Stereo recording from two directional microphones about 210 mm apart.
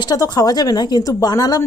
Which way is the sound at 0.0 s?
20° left (ahead or behind).